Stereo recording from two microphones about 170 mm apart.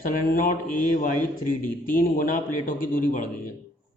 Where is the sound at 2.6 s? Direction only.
50° left (ahead or behind).